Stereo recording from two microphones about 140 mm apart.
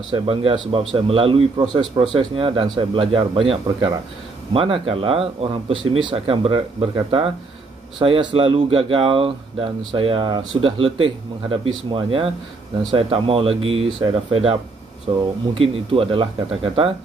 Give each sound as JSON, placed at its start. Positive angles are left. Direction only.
{"t": 0.1, "sound": "speech", "side_deg": -40}